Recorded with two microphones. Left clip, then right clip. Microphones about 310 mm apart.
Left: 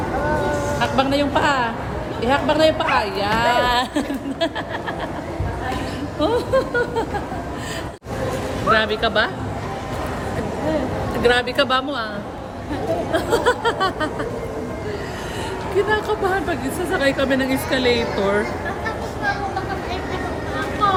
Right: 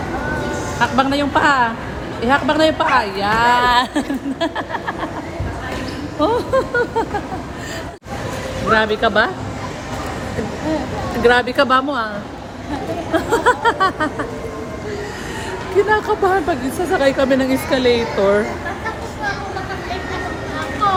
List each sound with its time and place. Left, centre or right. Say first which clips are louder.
0.8 s speech: right 4 dB; right
6.1 s speech: right 2 dB; centre
8.7 s speech: right 3 dB; centre
11.2 s speech: right 4 dB; centre
13.1 s speech: right 5 dB; centre
15.9 s a woman's voice: right 5 dB; centre
20.8 s vehicle: right 2 dB; centre